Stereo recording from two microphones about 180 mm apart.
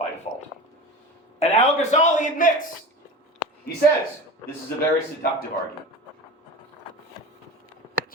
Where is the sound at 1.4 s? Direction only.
35° left (ahead or behind).